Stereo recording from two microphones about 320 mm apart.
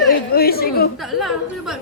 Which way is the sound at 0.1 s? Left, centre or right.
Left.